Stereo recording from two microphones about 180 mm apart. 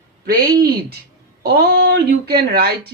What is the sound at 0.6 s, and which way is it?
Speech, 60° right (ahead or behind).